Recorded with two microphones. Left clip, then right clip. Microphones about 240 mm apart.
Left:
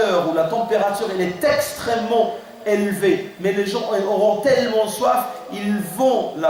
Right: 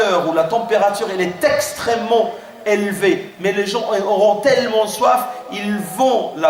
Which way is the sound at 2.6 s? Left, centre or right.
Centre.